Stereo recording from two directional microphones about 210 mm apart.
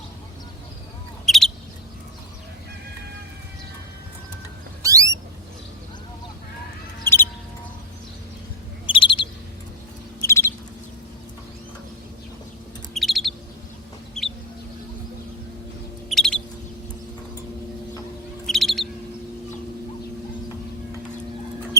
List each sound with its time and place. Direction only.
1.2 s bird: centre (ahead or behind)
4.8 s a sound: 15° right (ahead or behind)
7.0 s music: 10° left (ahead or behind)
8.9 s bird: 25° left (ahead or behind)
10.2 s bird: 10° left (ahead or behind)
12.9 s chirp: centre (ahead or behind)
16.0 s bird: centre (ahead or behind)
18.4 s bird: centre (ahead or behind)